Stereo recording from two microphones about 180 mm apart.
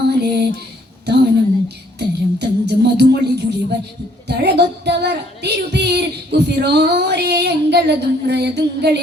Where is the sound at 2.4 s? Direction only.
70° right (ahead or behind).